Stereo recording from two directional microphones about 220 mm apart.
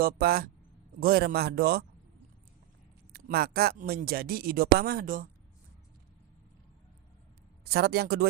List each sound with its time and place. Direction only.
0.0 s speech: 45° right (ahead or behind)
3.1 s speech: 45° right (ahead or behind)
7.6 s speech: 45° right (ahead or behind)